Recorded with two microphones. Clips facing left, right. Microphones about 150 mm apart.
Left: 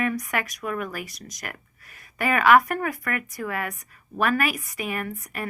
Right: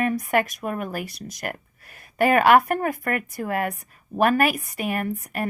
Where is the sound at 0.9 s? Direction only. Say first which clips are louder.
Right 4 dB; 60° right (ahead or behind).